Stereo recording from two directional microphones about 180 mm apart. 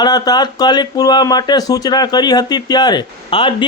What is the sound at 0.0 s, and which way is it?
Speech, 20° left (ahead or behind).